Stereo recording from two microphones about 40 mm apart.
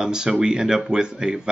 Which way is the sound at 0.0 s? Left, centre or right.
Centre.